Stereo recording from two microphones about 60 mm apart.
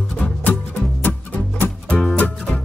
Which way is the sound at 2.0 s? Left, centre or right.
Left.